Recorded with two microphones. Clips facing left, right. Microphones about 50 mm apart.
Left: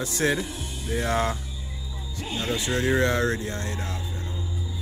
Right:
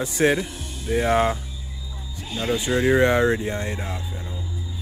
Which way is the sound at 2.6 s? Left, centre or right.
Centre.